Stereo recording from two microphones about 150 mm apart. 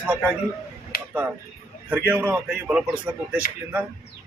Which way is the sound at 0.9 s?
80° left.